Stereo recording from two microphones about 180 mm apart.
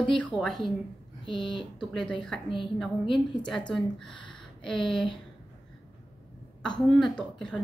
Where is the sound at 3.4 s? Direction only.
5° left (ahead or behind).